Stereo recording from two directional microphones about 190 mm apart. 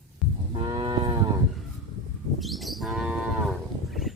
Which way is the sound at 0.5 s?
25° right (ahead or behind).